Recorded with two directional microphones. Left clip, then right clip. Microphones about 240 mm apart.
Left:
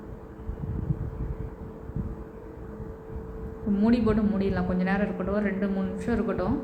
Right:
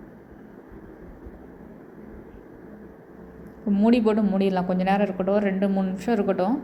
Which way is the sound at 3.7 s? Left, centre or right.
Right.